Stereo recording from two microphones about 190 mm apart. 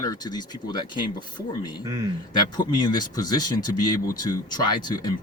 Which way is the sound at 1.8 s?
15° right (ahead or behind).